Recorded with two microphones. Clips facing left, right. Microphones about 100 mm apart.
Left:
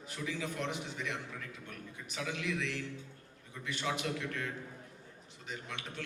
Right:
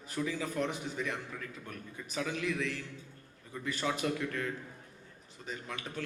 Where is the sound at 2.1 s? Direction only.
40° right (ahead or behind).